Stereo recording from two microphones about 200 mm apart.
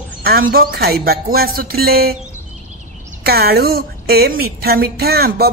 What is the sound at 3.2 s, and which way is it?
Speech, 50° right (ahead or behind).